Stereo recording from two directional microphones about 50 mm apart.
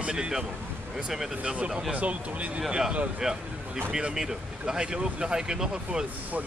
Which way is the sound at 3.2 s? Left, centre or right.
Centre.